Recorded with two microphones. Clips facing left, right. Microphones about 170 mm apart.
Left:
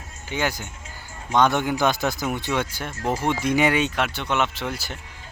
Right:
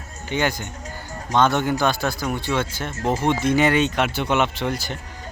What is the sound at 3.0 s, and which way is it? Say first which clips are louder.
Speech: right 3 dB; 25° right (ahead or behind).